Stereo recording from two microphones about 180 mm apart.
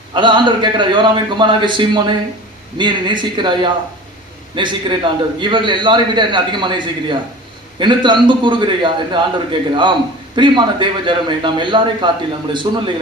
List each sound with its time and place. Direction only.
0.1 s a man's voice: 25° right (ahead or behind)